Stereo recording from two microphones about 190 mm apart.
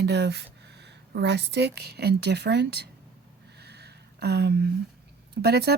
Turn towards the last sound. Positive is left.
turn(degrees=-60)  # may be behind; listen again after turning